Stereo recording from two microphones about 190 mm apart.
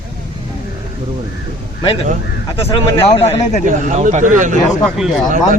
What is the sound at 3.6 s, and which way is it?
Speech, 40° right (ahead or behind).